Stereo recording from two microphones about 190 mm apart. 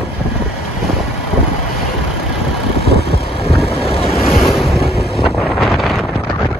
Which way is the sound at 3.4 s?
30° left (ahead or behind).